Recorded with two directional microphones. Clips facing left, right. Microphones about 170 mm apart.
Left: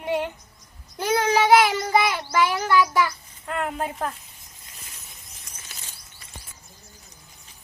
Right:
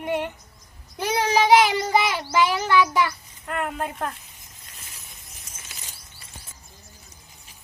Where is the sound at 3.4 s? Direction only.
Centre (ahead or behind).